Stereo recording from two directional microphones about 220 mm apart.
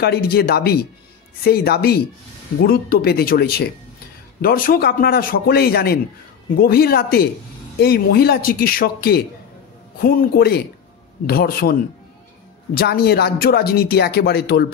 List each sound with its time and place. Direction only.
0.0 s speech: 45° left (ahead or behind)
12.7 s speech: 45° left (ahead or behind)